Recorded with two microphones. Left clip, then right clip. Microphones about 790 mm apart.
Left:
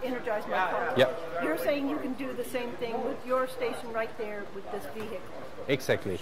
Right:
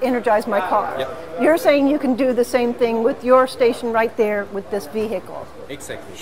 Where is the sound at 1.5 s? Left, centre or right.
Right.